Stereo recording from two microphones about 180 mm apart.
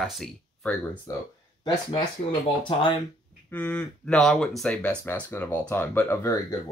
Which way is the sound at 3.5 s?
10° left (ahead or behind).